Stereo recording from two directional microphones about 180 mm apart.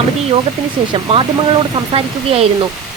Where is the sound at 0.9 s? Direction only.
30° right (ahead or behind).